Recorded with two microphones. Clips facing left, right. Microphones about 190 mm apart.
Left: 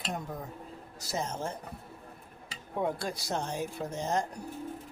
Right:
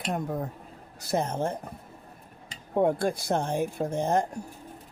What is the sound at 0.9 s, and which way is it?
Speech, 60° right (ahead or behind).